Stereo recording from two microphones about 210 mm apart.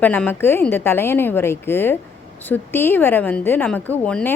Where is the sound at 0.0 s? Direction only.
10° left (ahead or behind).